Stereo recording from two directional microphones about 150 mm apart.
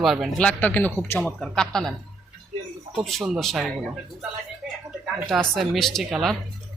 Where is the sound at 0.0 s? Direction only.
Centre (ahead or behind); by 1.3 s 15° left (ahead or behind).